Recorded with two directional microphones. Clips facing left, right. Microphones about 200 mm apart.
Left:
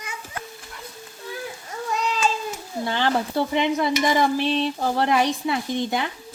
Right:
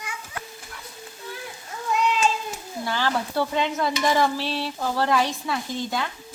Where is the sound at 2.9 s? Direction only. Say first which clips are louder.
Left 3 dB; 20° left (ahead or behind).